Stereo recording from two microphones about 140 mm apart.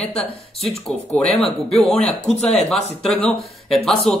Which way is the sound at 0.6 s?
Centre (ahead or behind).